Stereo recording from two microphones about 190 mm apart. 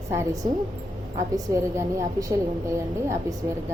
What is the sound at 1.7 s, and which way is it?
A woman's voice, 15° right (ahead or behind).